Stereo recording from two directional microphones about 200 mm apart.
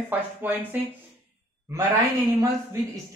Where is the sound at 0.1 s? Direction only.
10° right (ahead or behind).